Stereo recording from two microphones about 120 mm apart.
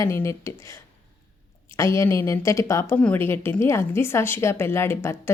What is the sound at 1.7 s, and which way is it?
A woman's voice, 25° left (ahead or behind).